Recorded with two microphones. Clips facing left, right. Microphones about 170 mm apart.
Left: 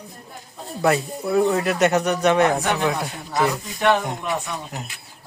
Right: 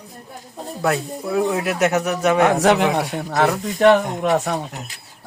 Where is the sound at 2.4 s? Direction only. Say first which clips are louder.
Right 4 dB; 90° right.